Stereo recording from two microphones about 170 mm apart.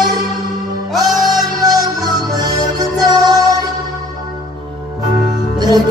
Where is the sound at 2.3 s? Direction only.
20° right (ahead or behind).